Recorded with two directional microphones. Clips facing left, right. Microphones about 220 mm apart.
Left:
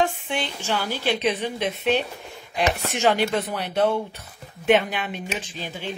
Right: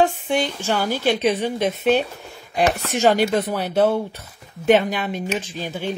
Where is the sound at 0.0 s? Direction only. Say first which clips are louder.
Right 5 dB; 40° right (ahead or behind).